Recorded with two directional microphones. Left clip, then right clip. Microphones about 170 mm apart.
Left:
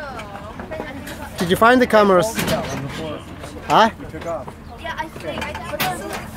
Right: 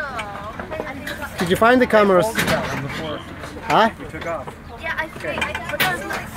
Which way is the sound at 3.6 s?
5° left (ahead or behind).